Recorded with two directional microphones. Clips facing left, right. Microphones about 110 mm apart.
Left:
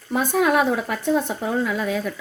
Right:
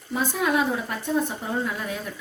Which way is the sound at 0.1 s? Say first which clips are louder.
Left 5 dB; 60° left (ahead or behind).